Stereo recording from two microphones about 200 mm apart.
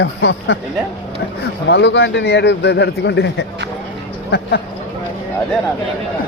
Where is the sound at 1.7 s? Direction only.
60° left (ahead or behind).